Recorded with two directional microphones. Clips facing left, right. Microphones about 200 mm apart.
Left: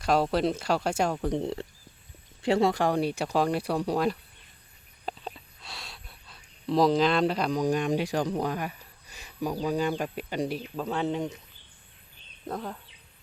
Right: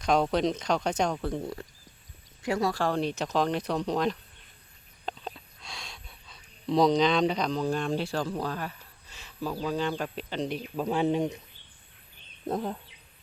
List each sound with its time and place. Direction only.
0.0 s speech: 5° left (ahead or behind)
1.3 s speech: 25° left (ahead or behind)
10.8 s speech: 15° right (ahead or behind)
12.5 s bird: 20° right (ahead or behind)